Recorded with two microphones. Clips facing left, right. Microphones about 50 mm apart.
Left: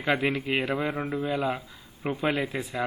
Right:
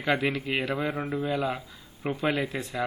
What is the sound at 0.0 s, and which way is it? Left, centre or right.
Speech, centre.